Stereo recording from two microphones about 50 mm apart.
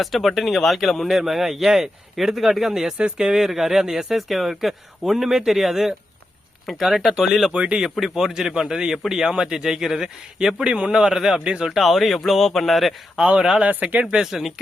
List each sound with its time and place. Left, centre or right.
0.0 s a man's voice: centre
3.0 s speech: centre
3.3 s speech: centre
7.5 s speech: right
7.9 s a man's voice: centre
11.8 s speech: centre
13.6 s speech: right
14.1 s a man's voice: centre